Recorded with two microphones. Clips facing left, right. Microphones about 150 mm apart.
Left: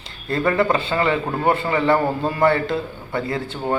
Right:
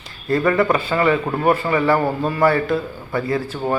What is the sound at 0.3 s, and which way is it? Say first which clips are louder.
A man's voice: right 2 dB; 25° left (ahead or behind).